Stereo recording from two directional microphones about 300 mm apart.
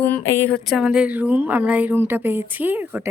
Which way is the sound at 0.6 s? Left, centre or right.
Centre.